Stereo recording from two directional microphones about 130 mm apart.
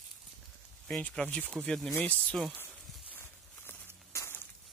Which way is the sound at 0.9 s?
10° left (ahead or behind).